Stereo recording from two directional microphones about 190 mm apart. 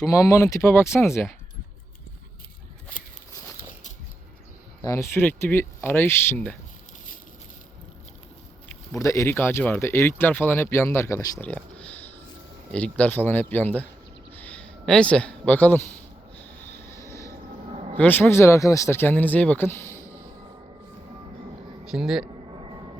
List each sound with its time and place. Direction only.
0.0 s speech: 20° left (ahead or behind)
4.8 s speech: 15° left (ahead or behind)
9.0 s speech: 15° left (ahead or behind)
16.6 s vehicle: 15° left (ahead or behind)
17.9 s speech: 10° left (ahead or behind)
21.8 s speech: 5° right (ahead or behind)
22.5 s vehicle: 25° right (ahead or behind)